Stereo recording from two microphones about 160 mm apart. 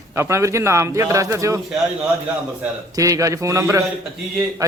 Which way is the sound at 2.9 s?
20° right (ahead or behind).